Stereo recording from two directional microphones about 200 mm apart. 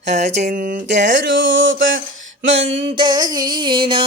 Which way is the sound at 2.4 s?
60° right (ahead or behind).